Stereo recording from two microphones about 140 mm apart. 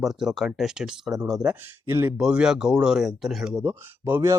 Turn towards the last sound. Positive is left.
turn(degrees=-15)  # may be behind; listen again after turning